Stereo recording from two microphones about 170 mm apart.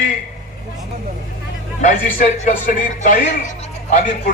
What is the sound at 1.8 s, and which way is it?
Speech, 45° left (ahead or behind).